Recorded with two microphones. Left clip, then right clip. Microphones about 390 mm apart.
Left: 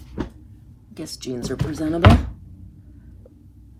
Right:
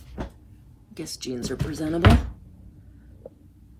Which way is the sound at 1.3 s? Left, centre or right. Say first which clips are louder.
Left 4 dB; left.